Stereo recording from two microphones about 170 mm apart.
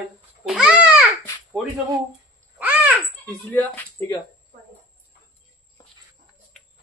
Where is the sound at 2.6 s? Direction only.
10° right (ahead or behind).